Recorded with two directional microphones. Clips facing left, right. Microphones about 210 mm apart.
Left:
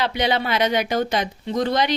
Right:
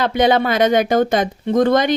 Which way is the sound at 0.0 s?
50° right (ahead or behind).